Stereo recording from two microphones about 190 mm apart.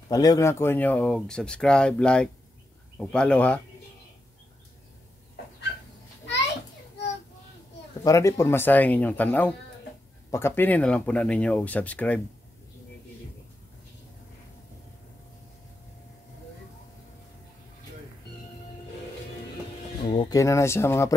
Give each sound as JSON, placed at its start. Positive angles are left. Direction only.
{"t": 0.1, "sound": "speech", "side_deg": 20}
{"t": 8.0, "sound": "speech", "side_deg": 15}
{"t": 20.1, "sound": "speech", "side_deg": 20}